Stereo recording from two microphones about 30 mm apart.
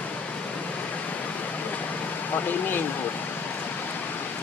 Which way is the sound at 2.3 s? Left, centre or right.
Left.